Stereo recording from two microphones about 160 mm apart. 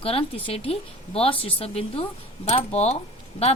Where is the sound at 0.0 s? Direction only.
35° left (ahead or behind).